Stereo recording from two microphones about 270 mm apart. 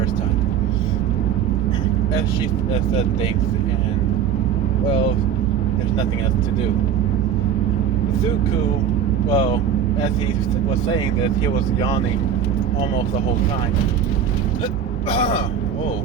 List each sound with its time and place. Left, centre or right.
9.3 s speech: centre
15.1 s speech: left